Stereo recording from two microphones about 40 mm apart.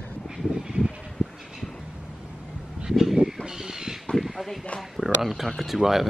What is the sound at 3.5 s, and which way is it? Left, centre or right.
Bird, centre.